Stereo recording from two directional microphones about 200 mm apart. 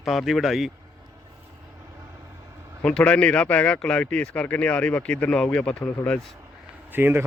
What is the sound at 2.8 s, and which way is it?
Speech, 5° left (ahead or behind).